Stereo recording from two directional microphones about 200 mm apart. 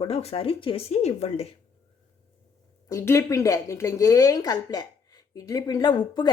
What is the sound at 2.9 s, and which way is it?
A woman's voice, 15° left (ahead or behind).